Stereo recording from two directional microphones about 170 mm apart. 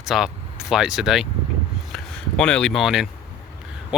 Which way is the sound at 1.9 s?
5° left (ahead or behind).